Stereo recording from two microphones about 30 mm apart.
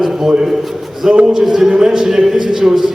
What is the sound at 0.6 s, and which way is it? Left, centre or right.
Speech, centre.